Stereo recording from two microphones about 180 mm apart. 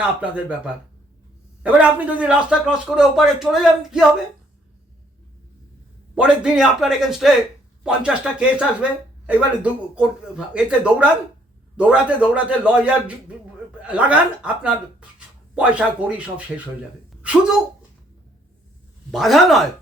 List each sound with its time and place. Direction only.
0.2 s a man's voice: 5° right (ahead or behind)
6.1 s a man's voice: 5° right (ahead or behind)
19.1 s speech: centre (ahead or behind)